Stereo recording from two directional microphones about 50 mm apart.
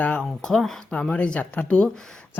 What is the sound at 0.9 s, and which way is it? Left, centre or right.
Speech, left.